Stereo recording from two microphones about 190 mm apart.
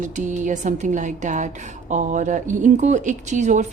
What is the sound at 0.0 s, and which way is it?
Speech, 40° right (ahead or behind).